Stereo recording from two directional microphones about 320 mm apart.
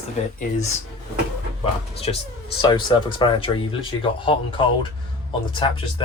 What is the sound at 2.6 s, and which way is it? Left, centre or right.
Speech, centre.